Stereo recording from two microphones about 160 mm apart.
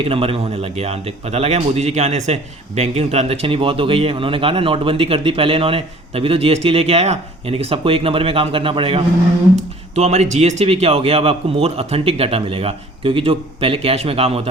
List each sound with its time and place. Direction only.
0.0 s a man's voice: 35° right (ahead or behind)